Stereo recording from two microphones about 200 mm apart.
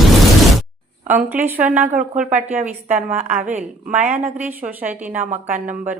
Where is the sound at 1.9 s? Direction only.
40° right (ahead or behind).